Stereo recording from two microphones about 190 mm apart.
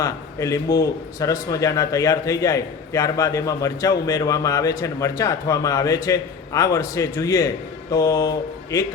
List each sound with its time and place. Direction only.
0.0 s a man's voice: 15° left (ahead or behind)